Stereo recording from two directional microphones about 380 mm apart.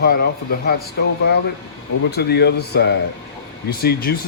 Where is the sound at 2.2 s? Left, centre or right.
Left.